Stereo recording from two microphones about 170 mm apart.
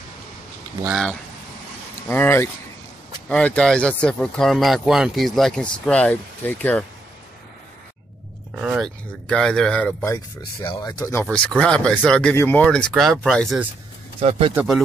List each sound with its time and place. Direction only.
0.8 s speech: centre (ahead or behind)
2.0 s speech: 15° left (ahead or behind)
8.5 s speech: centre (ahead or behind)
10.6 s speech: 25° left (ahead or behind)
11.2 s speech: 5° left (ahead or behind)
14.5 s speech: 5° right (ahead or behind)